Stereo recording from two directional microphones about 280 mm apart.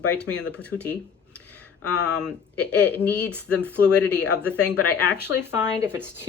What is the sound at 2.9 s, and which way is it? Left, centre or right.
Speech, centre.